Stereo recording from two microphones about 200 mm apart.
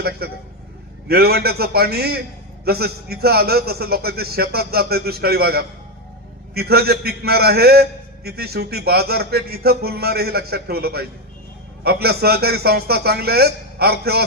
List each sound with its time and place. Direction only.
0.2 s a man's voice: 50° right (ahead or behind)